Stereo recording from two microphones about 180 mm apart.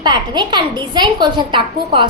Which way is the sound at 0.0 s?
25° right (ahead or behind).